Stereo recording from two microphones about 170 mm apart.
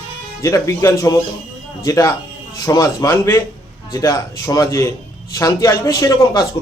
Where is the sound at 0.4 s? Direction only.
20° left (ahead or behind).